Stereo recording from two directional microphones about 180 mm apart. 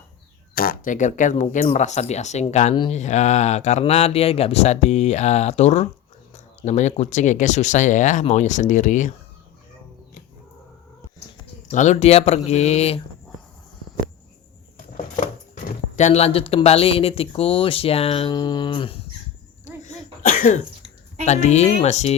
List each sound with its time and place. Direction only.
0.5 s speech: 55° left (ahead or behind)
11.7 s speech: 40° left (ahead or behind)
15.6 s speech: 40° left (ahead or behind)
19.6 s cough: 45° left (ahead or behind)
21.2 s speech: 40° left (ahead or behind)